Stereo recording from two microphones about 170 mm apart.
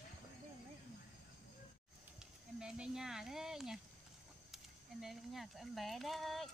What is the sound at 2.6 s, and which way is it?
Speech, 5° right (ahead or behind).